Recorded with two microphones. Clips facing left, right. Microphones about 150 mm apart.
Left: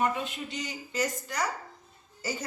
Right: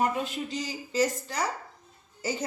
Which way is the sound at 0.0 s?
35° right (ahead or behind).